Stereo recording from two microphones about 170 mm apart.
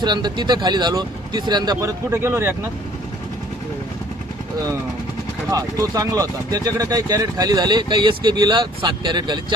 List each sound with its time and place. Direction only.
0.0 s speech: 25° right (ahead or behind)
5.5 s speech: 20° right (ahead or behind)